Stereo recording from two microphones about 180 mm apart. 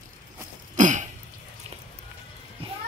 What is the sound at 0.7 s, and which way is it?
Throat clearing, 45° right (ahead or behind).